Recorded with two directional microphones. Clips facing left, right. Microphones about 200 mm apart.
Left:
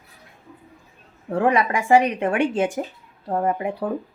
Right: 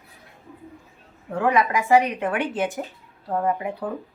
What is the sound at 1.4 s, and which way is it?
A woman's voice, 30° left (ahead or behind).